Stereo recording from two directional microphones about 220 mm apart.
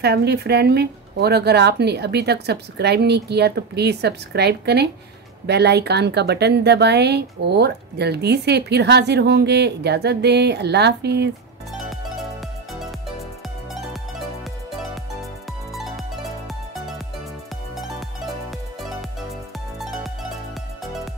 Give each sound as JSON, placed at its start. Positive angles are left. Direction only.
{"t": 0.0, "sound": "speech", "side_deg": -50}
{"t": 11.7, "sound": "music", "side_deg": 0}
{"t": 15.7, "sound": "music", "side_deg": 0}